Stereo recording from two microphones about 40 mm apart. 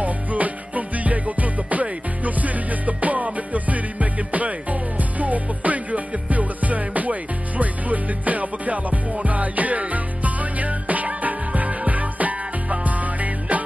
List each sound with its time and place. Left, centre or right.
0.0 s music: right